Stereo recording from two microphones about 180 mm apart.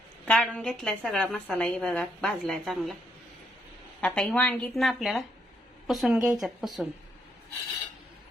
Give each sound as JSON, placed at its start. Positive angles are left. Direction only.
{"t": 0.3, "sound": "a woman's voice", "side_deg": 5}
{"t": 4.0, "sound": "a woman's voice", "side_deg": 5}